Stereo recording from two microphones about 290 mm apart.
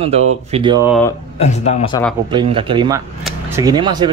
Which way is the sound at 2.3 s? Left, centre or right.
Centre.